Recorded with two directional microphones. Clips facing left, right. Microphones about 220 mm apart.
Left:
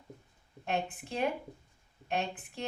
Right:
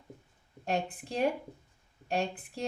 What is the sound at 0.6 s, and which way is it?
Speech, 35° right (ahead or behind).